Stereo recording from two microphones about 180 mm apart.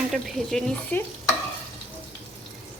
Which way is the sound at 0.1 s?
5° left (ahead or behind).